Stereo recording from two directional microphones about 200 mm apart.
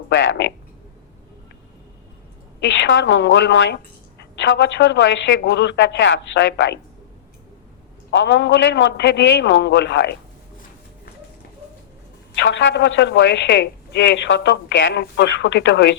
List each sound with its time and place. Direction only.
0.1 s speech: 65° left (ahead or behind)
2.6 s a woman's voice: 60° left (ahead or behind)
8.1 s a woman's voice: 60° left (ahead or behind)
12.3 s a woman's voice: 65° left (ahead or behind)